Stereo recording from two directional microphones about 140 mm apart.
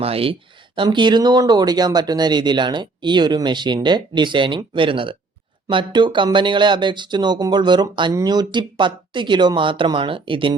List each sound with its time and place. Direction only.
0.0 s speech: 45° right (ahead or behind)